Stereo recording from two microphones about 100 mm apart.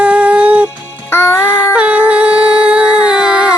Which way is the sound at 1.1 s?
25° left (ahead or behind).